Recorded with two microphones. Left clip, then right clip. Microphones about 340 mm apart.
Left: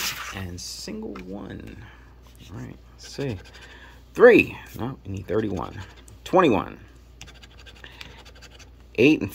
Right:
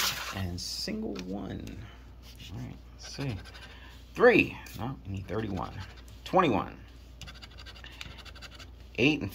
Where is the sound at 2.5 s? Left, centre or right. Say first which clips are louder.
Left 5 dB; centre.